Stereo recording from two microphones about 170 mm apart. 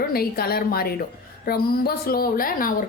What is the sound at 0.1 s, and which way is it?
A woman's voice, 65° left (ahead or behind).